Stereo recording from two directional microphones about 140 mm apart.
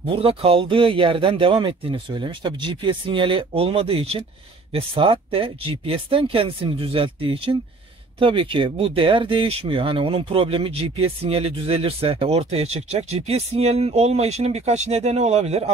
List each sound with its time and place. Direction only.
0.0 s speech: 40° right (ahead or behind)